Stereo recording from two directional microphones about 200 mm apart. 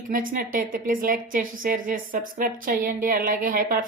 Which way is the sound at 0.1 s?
45° right (ahead or behind).